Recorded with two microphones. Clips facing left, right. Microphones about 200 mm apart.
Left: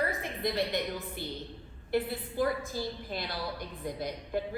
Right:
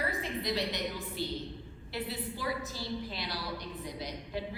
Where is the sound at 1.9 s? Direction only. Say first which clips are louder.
Left 6 dB; 50° left (ahead or behind).